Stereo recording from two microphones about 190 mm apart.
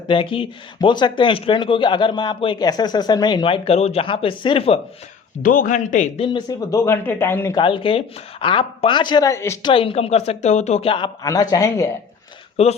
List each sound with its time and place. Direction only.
0.1 s speech: 25° left (ahead or behind)
5.4 s speech: 45° left (ahead or behind)
6.2 s speech: 20° left (ahead or behind)
7.6 s speech: 25° left (ahead or behind)
9.7 s speech: 30° left (ahead or behind)
12.6 s speech: 30° left (ahead or behind)